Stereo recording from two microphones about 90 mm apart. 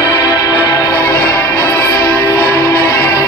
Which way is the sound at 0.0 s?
25° right (ahead or behind).